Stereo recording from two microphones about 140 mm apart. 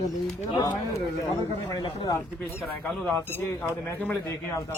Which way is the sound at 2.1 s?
20° left (ahead or behind).